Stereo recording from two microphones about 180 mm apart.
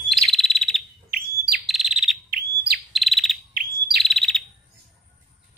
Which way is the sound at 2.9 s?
Centre (ahead or behind).